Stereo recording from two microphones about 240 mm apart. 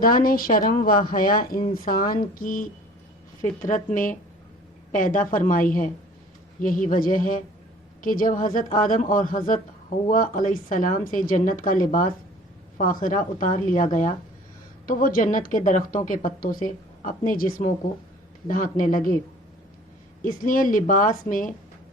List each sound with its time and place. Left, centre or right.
0.0 s a woman's voice: left
3.9 s a woman's voice: left
20.2 s a woman's voice: left